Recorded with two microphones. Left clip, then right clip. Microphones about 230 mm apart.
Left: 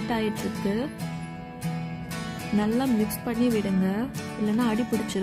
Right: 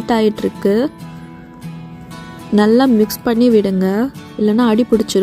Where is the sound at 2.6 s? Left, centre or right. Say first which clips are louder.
Right 15 dB; right.